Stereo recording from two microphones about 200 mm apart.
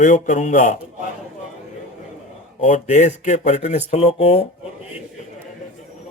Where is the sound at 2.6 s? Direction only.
35° left (ahead or behind).